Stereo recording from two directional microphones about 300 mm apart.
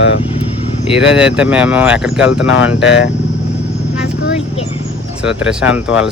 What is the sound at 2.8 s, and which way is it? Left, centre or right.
Speech, left.